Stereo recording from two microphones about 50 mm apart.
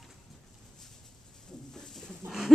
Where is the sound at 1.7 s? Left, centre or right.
Centre.